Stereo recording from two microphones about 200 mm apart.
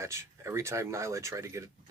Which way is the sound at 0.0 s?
15° right (ahead or behind).